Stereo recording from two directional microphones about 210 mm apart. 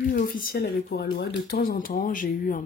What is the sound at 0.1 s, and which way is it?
Speech, 40° left (ahead or behind).